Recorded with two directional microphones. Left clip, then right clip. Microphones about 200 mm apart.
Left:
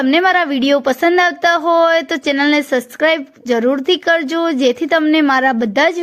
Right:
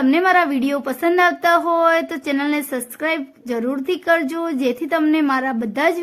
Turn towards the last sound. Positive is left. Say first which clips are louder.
# left 5 dB
turn(degrees=20)  # may be behind; listen again after turning